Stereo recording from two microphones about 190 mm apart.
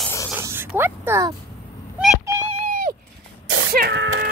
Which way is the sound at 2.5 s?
45° right (ahead or behind).